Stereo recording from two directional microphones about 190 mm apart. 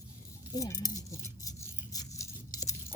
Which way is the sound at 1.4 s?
20° left (ahead or behind).